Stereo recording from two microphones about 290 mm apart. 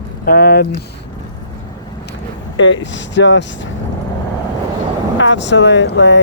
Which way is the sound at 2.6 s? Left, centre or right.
Left.